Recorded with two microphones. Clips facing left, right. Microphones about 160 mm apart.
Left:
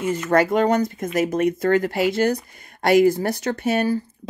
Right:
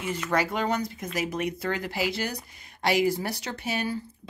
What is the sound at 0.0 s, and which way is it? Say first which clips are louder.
Speech: left 8 dB; 45° left (ahead or behind).